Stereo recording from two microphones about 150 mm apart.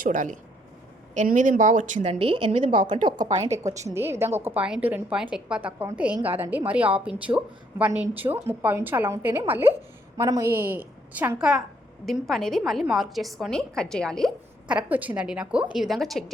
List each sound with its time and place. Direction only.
0.0 s speech: 60° right (ahead or behind)
2.1 s a woman's voice: 40° right (ahead or behind)
3.2 s a woman's voice: 50° right (ahead or behind)
3.5 s a woman's voice: 20° right (ahead or behind); by 16.2 s centre (ahead or behind)